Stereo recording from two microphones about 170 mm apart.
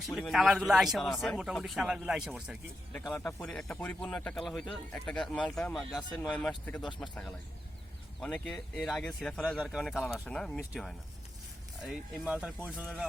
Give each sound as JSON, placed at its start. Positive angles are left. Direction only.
{"t": 0.0, "sound": "speech", "side_deg": 0}
{"t": 2.9, "sound": "speech", "side_deg": 5}
{"t": 6.9, "sound": "speech", "side_deg": 25}
{"t": 8.2, "sound": "speech", "side_deg": 5}